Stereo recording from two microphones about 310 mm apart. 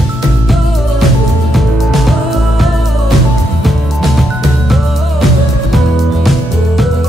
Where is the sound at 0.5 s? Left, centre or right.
Centre.